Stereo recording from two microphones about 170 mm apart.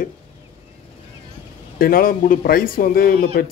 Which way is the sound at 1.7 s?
60° left (ahead or behind).